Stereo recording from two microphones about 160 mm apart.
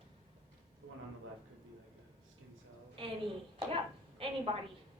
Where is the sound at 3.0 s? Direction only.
35° right (ahead or behind).